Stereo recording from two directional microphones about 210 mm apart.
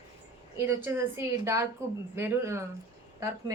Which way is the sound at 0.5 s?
10° right (ahead or behind).